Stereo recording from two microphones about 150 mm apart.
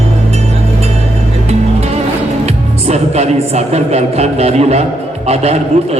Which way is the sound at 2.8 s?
45° right (ahead or behind).